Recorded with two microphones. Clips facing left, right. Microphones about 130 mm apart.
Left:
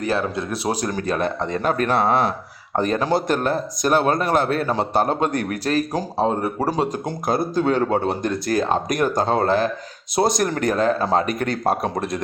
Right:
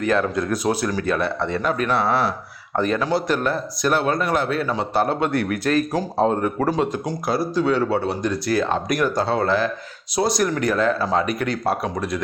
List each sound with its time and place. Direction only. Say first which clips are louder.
0.0 s speech: right 2 dB; 30° left (ahead or behind)
7.0 s speech: left 1 dB; 55° left (ahead or behind)